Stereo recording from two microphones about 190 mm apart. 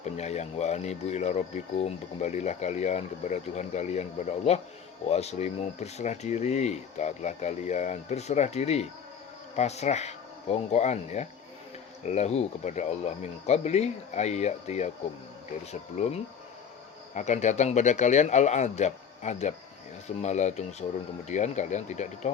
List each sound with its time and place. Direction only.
0.0 s speech: 35° left (ahead or behind)
17.2 s speech: 40° left (ahead or behind)